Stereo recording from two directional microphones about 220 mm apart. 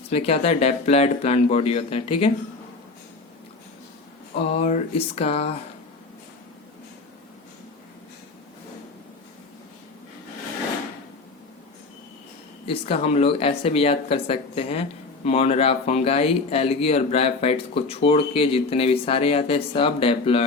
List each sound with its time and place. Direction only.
0.1 s speech: 25° left (ahead or behind)
4.4 s speech: 30° left (ahead or behind)
12.6 s speech: 25° left (ahead or behind)